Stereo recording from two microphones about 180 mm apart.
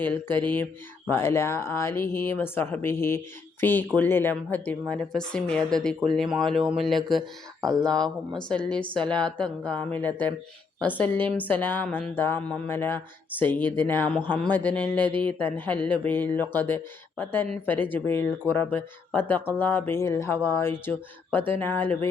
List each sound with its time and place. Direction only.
0.0 s speech: 10° left (ahead or behind)
7.2 s speech: 20° right (ahead or behind)
8.4 s speech: 5° left (ahead or behind)